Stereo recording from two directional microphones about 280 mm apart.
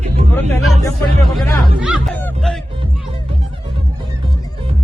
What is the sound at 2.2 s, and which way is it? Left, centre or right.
Honk, centre.